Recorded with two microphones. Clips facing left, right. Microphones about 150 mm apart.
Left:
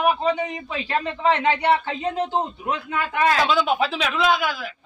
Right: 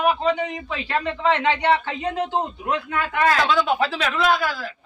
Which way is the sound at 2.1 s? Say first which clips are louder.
Even; 10° right (ahead or behind).